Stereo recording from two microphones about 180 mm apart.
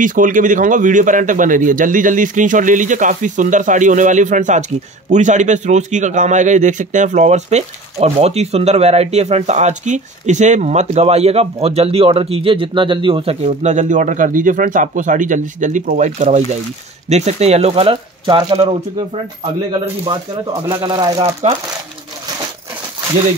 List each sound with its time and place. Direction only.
0.0 s a man's voice: 45° right (ahead or behind); by 21.3 s 25° right (ahead or behind)